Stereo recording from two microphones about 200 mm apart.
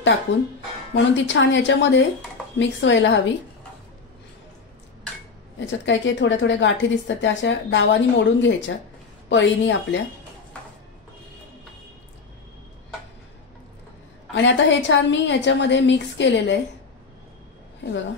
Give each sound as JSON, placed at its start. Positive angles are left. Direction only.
{"t": 0.3, "sound": "a woman's voice", "side_deg": 65}
{"t": 5.7, "sound": "a woman's voice", "side_deg": 65}
{"t": 14.3, "sound": "a woman's voice", "side_deg": 60}